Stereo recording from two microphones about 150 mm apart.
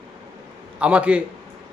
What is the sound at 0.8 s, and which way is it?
Speech, 10° right (ahead or behind).